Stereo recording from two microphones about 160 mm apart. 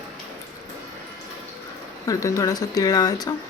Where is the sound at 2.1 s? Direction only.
20° left (ahead or behind).